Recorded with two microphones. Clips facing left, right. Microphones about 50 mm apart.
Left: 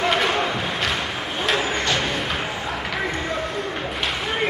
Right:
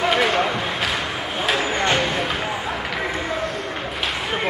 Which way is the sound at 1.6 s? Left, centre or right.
Right.